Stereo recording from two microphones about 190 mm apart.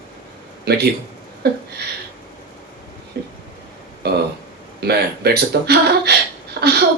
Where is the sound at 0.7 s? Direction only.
55° right (ahead or behind).